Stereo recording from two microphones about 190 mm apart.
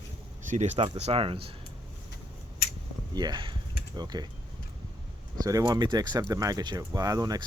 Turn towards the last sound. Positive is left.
turn(degrees=-20)  # may be behind; listen again after turning